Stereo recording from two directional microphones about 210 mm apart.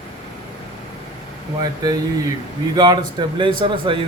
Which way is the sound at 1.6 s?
20° right (ahead or behind).